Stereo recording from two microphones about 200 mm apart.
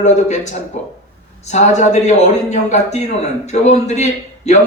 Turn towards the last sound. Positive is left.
turn(degrees=35)  # may be behind; listen again after turning